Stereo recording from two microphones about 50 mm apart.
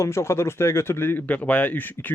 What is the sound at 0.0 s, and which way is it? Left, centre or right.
Speech, left.